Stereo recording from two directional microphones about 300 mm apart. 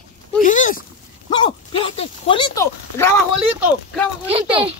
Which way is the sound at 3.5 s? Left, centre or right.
Centre.